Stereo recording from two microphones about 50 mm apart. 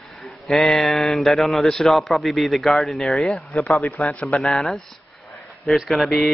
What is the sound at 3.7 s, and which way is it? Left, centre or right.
Speech, left.